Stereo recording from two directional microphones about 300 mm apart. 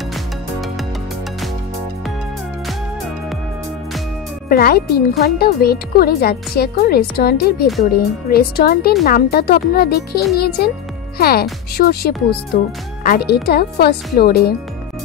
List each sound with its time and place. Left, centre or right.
4.5 s speech: left